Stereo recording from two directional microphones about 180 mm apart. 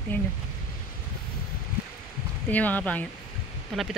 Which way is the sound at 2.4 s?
10° left (ahead or behind).